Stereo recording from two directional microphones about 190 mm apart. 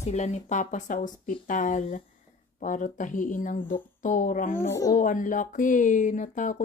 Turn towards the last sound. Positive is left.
turn(degrees=45)  # may be behind; listen again after turning